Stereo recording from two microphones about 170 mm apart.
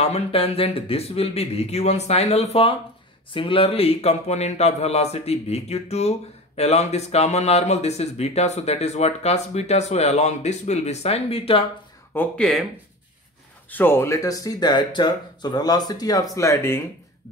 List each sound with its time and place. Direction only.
0.0 s speech: 35° left (ahead or behind)
12.1 s speech: 10° left (ahead or behind)
13.7 s speech: 10° left (ahead or behind)